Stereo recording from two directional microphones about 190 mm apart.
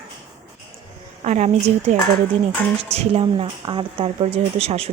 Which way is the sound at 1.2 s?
35° right (ahead or behind).